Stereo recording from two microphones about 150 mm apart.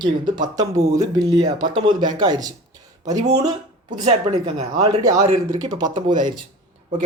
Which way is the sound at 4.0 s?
50° right (ahead or behind).